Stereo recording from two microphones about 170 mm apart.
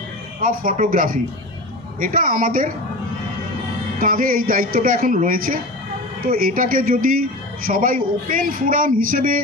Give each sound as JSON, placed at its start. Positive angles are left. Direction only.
{"t": 0.4, "sound": "a woman's voice", "side_deg": -55}
{"t": 4.0, "sound": "a woman's voice", "side_deg": -55}